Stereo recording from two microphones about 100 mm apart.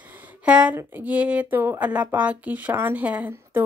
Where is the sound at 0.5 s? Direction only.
10° right (ahead or behind).